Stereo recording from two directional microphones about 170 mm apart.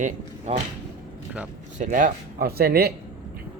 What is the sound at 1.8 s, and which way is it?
Speech, 50° right (ahead or behind).